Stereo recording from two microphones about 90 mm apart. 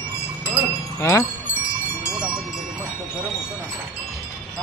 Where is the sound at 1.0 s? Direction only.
30° left (ahead or behind).